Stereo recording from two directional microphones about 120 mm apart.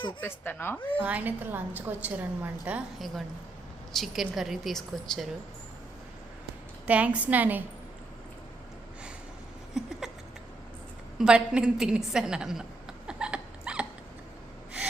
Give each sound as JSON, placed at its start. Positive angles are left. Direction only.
{"t": 0.2, "sound": "a woman's voice", "side_deg": 15}
{"t": 1.0, "sound": "a woman's voice", "side_deg": -15}
{"t": 3.9, "sound": "a woman's voice", "side_deg": 0}
{"t": 6.8, "sound": "a woman's voice", "side_deg": -10}
{"t": 9.7, "sound": "a sound", "side_deg": -5}
{"t": 11.2, "sound": "a woman's voice", "side_deg": -10}
{"t": 13.1, "sound": "a sound", "side_deg": -10}